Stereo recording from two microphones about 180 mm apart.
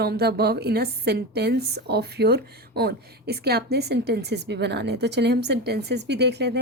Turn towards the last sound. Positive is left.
turn(degrees=-70)  # may be behind; listen again after turning